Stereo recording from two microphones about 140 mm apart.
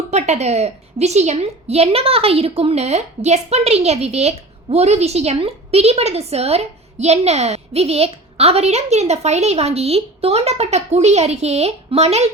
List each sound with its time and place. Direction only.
0.1 s a woman's voice: 50° right (ahead or behind)